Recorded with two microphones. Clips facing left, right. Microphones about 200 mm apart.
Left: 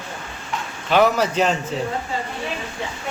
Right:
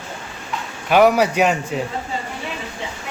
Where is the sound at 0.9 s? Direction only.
10° right (ahead or behind).